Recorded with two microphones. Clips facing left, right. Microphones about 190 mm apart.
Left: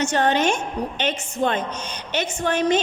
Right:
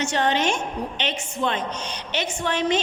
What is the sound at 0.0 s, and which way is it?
A woman's voice, 45° left (ahead or behind).